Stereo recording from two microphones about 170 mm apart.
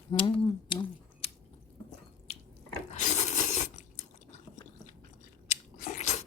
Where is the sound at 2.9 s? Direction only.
45° left (ahead or behind).